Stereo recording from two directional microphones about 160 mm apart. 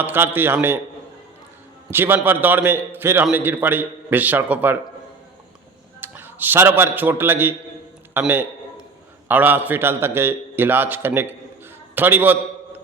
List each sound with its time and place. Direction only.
0.0 s a man's voice: 15° right (ahead or behind)
1.9 s a man's voice: 15° right (ahead or behind)
6.0 s a man's voice: 15° right (ahead or behind)